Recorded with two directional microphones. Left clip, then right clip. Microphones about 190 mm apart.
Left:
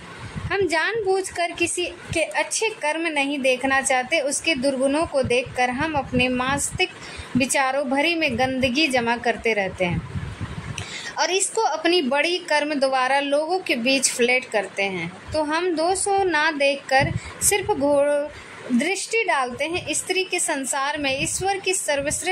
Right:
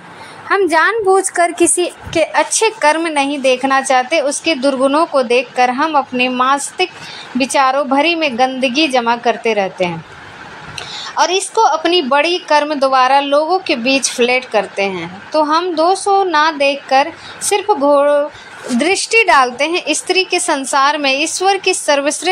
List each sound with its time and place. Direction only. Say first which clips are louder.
0.5 s a woman's voice: right 10 dB; 15° right (ahead or behind)
1.3 s a woman's voice: right 11 dB; 25° right (ahead or behind)
2.1 s a woman's voice: right 10 dB; 15° right (ahead or behind)